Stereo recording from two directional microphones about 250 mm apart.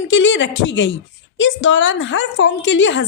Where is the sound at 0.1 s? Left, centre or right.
Left.